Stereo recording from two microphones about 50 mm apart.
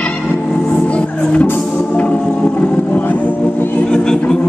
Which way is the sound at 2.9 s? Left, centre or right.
Left.